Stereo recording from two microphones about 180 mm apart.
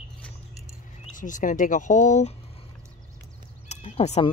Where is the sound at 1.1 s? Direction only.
45° left (ahead or behind).